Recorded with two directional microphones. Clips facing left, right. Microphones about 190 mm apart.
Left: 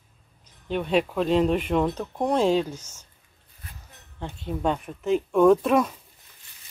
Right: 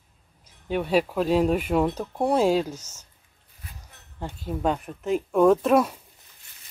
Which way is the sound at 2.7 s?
10° left (ahead or behind).